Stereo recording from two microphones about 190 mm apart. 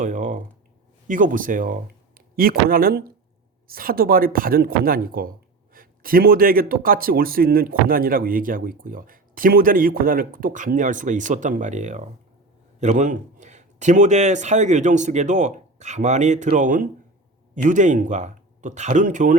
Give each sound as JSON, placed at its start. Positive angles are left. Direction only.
{"t": 0.0, "sound": "a man's voice", "side_deg": -40}